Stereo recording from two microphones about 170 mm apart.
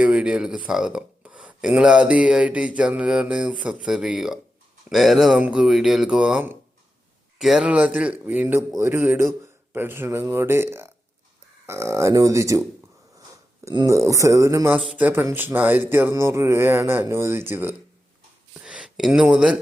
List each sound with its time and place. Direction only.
0.0 s speech: 5° right (ahead or behind)
13.7 s speech: 20° right (ahead or behind)